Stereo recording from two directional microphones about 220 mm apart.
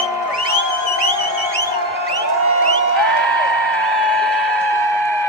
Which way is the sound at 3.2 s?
5° left (ahead or behind).